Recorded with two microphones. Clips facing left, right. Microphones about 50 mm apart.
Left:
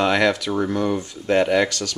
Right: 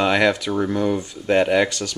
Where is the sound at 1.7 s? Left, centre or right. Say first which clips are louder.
Even; right.